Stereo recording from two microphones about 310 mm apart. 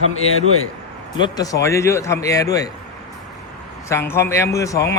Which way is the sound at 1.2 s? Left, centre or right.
Centre.